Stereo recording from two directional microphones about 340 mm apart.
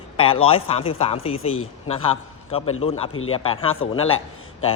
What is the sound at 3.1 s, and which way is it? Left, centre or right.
Speech, left.